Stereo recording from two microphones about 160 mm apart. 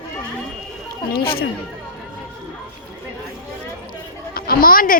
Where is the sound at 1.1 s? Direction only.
70° left (ahead or behind).